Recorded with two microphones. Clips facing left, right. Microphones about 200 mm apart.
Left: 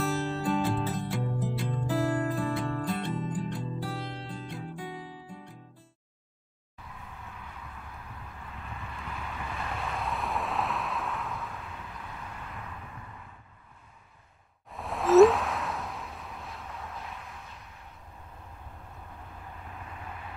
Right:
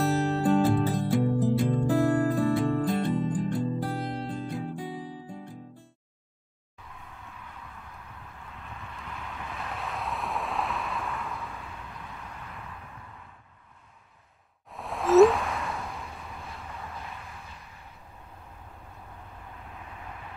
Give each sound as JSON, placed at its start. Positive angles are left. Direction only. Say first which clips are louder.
{"t": 0.0, "sound": "music", "louder": "right 5 dB", "side_deg": -45}
{"t": 8.8, "sound": "vehicle", "louder": "left 1 dB", "side_deg": 5}
{"t": 14.7, "sound": "a sound", "louder": "even", "side_deg": 0}